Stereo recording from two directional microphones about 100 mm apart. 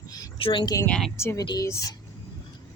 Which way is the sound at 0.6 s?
35° left (ahead or behind).